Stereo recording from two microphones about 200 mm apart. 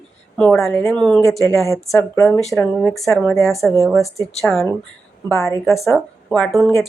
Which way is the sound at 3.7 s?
15° right (ahead or behind).